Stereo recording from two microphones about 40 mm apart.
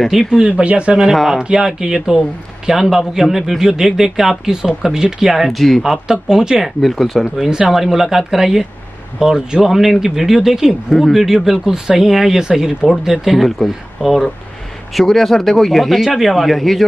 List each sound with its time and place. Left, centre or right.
0.3 s speech: right
1.1 s speech: centre
1.4 s speech: centre
5.9 s speech: centre
6.6 s speech: centre
7.3 s speech: centre
10.9 s speech: centre
11.2 s speech: centre
15.0 s speech: centre